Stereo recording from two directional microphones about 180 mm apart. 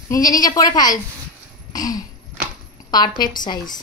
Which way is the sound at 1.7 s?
20° left (ahead or behind).